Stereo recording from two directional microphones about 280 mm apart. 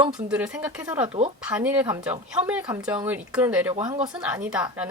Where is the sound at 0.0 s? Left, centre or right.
Centre.